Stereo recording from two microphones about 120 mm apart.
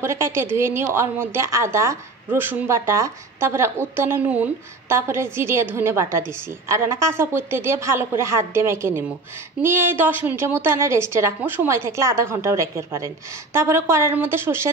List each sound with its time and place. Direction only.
0.0 s a woman's voice: 20° right (ahead or behind)